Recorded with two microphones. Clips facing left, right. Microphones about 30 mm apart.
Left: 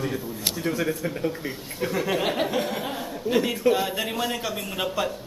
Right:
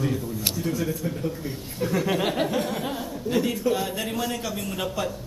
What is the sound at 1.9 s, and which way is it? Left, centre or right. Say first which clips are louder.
A man's voice: right 1 dB; centre.